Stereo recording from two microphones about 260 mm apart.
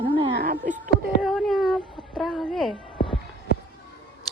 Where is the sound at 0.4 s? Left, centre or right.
Right.